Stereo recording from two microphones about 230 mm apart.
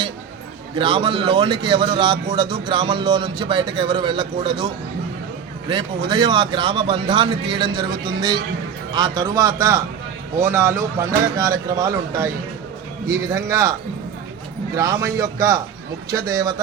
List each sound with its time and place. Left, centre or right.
0.8 s a man's voice: right
14.8 s a man's voice: centre